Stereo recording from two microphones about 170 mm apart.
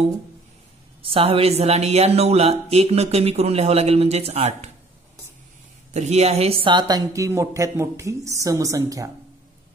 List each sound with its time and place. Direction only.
1.0 s speech: 35° right (ahead or behind)
5.9 s speech: 40° right (ahead or behind); by 9.1 s 20° right (ahead or behind)